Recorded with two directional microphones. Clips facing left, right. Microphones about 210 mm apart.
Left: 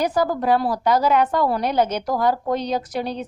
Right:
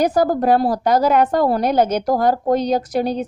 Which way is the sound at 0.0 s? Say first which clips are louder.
Right 4 dB; 45° right (ahead or behind).